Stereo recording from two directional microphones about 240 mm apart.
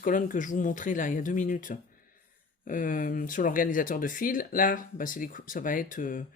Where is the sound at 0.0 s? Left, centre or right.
Left.